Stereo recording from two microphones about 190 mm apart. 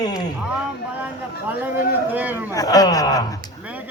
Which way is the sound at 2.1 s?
10° right (ahead or behind).